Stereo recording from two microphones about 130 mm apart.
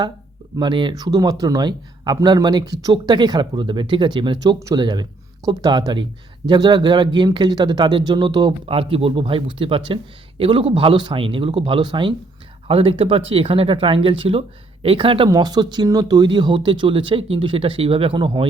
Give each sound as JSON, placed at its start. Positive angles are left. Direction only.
{"t": 0.5, "sound": "speech", "side_deg": -35}
{"t": 15.3, "sound": "speech", "side_deg": -30}